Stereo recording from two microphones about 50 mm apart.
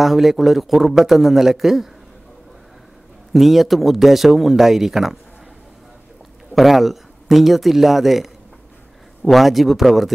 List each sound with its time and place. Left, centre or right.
0.0 s a man's voice: centre
3.3 s a man's voice: centre
6.5 s a man's voice: centre